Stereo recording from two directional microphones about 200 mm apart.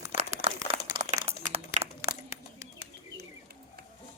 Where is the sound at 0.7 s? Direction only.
30° right (ahead or behind).